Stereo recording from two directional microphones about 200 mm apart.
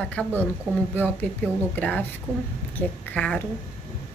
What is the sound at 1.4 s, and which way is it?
A woman's voice, 5° left (ahead or behind).